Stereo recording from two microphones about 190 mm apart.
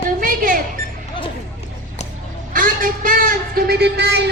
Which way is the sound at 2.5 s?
45° right (ahead or behind).